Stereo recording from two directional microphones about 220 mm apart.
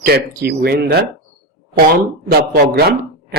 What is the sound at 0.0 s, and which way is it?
Speech, 45° right (ahead or behind).